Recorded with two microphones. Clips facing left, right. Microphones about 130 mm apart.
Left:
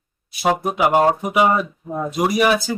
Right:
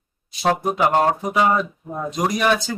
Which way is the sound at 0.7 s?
10° left (ahead or behind).